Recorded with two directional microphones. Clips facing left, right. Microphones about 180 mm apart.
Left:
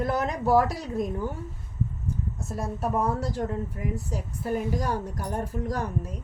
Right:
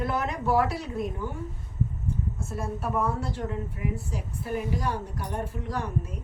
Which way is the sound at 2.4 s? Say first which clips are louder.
Left 4 dB; 40° left (ahead or behind).